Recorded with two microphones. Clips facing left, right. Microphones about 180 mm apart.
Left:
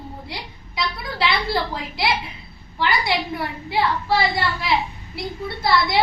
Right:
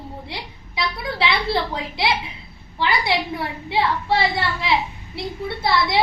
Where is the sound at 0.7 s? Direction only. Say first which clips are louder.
Right 1 dB; 25° right (ahead or behind).